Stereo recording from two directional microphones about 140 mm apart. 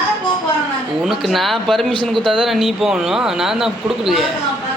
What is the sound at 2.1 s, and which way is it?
Speech, 35° right (ahead or behind).